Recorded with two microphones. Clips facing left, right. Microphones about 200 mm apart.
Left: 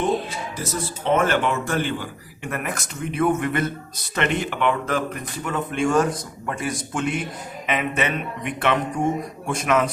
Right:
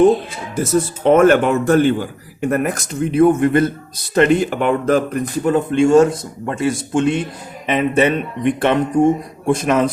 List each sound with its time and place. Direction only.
0.6 s speech: 50° right (ahead or behind); by 9.9 s 30° right (ahead or behind)